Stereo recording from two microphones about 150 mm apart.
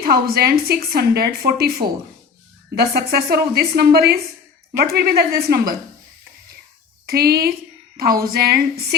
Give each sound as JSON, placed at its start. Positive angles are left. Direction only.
{"t": 0.0, "sound": "speech", "side_deg": -90}
{"t": 2.7, "sound": "speech", "side_deg": -90}
{"t": 7.1, "sound": "speech", "side_deg": -90}